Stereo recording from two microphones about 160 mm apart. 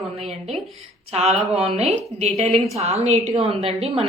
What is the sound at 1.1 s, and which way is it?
A woman's voice, 40° right (ahead or behind).